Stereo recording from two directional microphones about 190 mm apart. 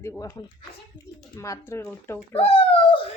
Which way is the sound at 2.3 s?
30° left (ahead or behind).